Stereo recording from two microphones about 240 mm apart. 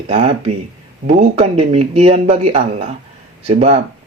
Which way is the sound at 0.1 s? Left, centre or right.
Right.